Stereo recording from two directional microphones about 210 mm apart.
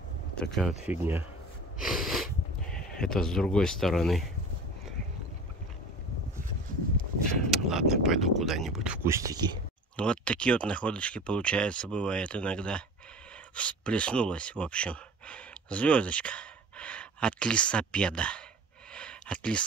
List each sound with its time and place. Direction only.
0.4 s speech: centre (ahead or behind)
1.8 s sneeze: centre (ahead or behind)
2.7 s speech: 5° left (ahead or behind)
7.2 s speech: centre (ahead or behind); by 9.6 s 20° right (ahead or behind)
9.9 s speech: 5° left (ahead or behind)
18.9 s a sound: 5° left (ahead or behind)